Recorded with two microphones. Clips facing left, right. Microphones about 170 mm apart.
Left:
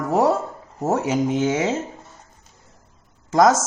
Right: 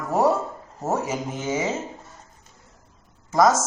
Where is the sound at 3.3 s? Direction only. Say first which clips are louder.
Left 3 dB; 90° left.